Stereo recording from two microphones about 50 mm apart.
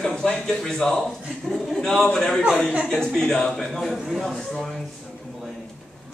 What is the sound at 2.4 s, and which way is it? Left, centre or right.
Speech, right.